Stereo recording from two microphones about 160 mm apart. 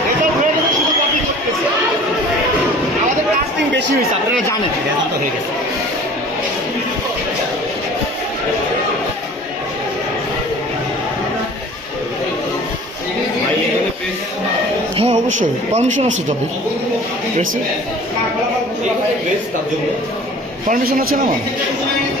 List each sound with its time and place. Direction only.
14.9 s speech: 40° right (ahead or behind)
20.7 s a man's voice: 60° right (ahead or behind)